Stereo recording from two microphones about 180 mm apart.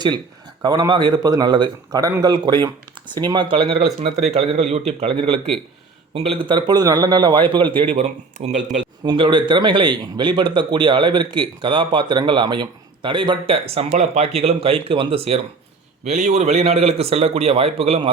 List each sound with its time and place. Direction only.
0.6 s a man's voice: 25° right (ahead or behind)
8.6 s a man's voice: 25° right (ahead or behind)